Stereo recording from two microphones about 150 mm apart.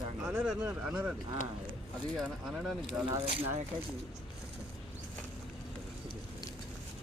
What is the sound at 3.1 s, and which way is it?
Speech, 35° right (ahead or behind).